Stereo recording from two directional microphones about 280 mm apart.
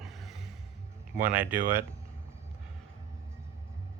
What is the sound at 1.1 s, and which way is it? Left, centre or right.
Speech, centre.